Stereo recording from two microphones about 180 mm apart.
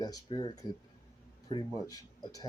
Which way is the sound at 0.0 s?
20° left (ahead or behind).